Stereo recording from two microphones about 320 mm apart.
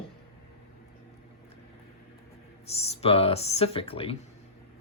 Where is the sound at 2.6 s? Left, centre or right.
Centre.